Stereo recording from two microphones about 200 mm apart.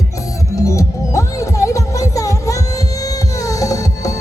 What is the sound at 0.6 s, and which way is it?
Music, 15° left (ahead or behind).